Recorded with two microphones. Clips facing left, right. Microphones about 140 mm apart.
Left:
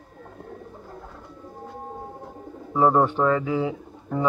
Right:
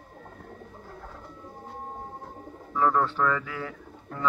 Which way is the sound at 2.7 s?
30° left (ahead or behind).